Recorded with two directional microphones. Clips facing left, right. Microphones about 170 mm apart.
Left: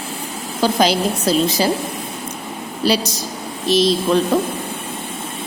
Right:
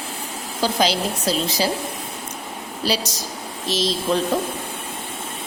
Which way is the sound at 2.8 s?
60° left (ahead or behind).